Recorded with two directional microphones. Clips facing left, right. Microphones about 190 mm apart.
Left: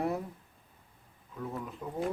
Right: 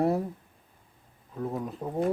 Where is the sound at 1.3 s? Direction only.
40° right (ahead or behind).